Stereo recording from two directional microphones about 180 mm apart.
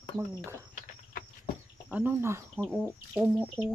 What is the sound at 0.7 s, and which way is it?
Cricket, 50° left (ahead or behind).